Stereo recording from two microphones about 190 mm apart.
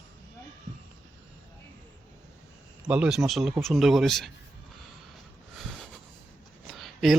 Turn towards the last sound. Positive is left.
turn(degrees=0)  # may be behind; listen again after turning